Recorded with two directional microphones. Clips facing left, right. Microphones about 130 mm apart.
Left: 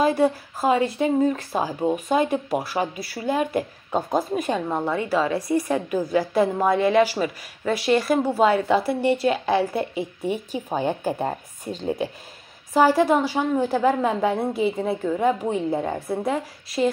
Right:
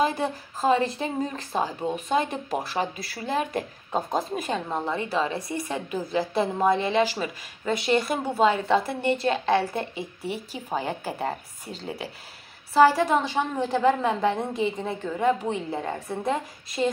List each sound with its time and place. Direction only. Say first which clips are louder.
0.0 s speech: left 5 dB; 5° left (ahead or behind)
5.5 s a woman's voice: left 8 dB; 40° left (ahead or behind)
5.9 s speech: left 4 dB; 5° left (ahead or behind)